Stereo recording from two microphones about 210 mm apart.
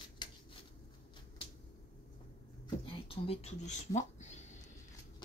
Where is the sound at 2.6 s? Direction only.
25° left (ahead or behind).